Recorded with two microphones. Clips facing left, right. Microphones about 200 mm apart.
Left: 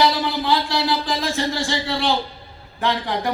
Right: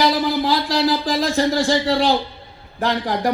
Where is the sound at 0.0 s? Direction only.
40° right (ahead or behind).